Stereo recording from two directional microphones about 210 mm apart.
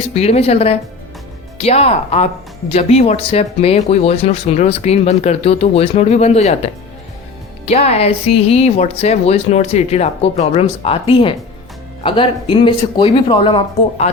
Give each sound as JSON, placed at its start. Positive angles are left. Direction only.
{"t": 0.1, "sound": "speech", "side_deg": 30}
{"t": 7.6, "sound": "speech", "side_deg": 30}